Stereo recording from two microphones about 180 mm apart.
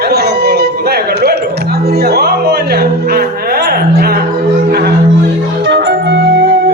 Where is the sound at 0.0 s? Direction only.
65° right (ahead or behind).